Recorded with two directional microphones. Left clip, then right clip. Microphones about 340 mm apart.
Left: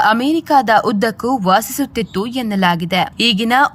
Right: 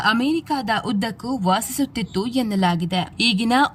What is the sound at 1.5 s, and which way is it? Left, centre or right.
Speech, centre.